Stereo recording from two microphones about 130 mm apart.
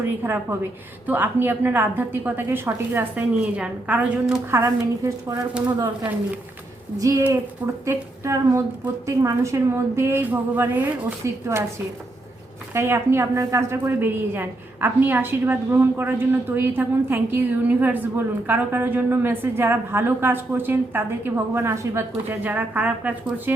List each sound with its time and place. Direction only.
0.0 s a woman's voice: 20° right (ahead or behind)
4.6 s a woman's voice: 20° right (ahead or behind)
7.0 s a woman's voice: 25° right (ahead or behind)
12.7 s a woman's voice: 20° right (ahead or behind)